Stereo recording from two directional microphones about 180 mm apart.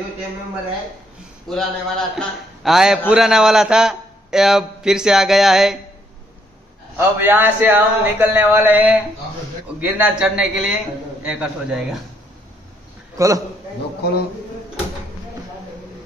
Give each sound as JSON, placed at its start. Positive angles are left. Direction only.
{"t": 1.5, "sound": "a man's voice", "side_deg": 0}
{"t": 7.0, "sound": "a man's voice", "side_deg": -10}
{"t": 13.2, "sound": "speech", "side_deg": -20}